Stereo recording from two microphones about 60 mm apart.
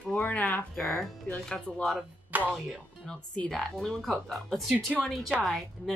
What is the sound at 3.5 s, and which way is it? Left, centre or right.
Speech, centre.